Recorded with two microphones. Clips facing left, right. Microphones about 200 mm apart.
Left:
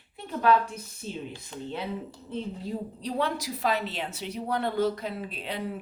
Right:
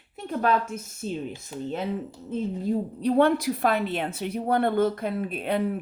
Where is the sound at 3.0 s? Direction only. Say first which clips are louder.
Right 10 dB; 55° right (ahead or behind).